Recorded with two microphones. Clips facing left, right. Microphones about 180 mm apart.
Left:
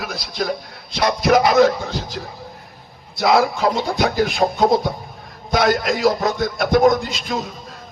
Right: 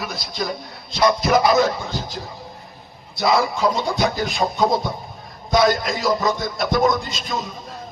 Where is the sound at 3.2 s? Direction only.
60° left (ahead or behind).